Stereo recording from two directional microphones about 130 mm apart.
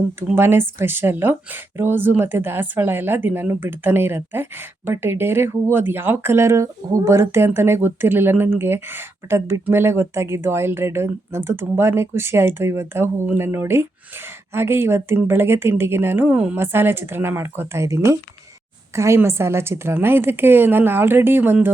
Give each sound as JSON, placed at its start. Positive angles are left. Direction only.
{"t": 0.3, "sound": "a woman's voice", "side_deg": -15}